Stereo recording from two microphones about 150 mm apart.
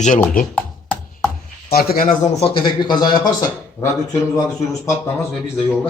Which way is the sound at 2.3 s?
35° left (ahead or behind).